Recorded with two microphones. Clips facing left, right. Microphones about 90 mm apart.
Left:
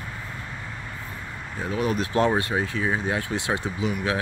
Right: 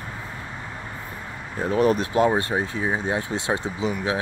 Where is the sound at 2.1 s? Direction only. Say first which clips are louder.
Right 2 dB; 20° right (ahead or behind).